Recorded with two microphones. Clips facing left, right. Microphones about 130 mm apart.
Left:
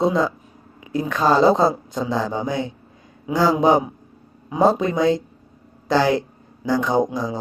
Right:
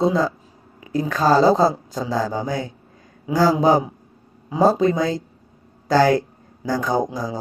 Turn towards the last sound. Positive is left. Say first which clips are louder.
# left 2 dB
turn(degrees=-40)  # may be behind; listen again after turning